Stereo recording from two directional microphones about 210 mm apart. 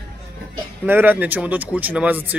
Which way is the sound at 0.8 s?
10° right (ahead or behind).